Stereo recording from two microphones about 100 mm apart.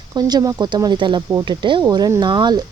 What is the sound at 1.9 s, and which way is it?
Speech, 40° right (ahead or behind).